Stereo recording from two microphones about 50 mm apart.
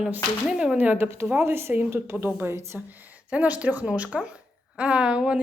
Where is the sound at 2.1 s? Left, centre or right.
Right.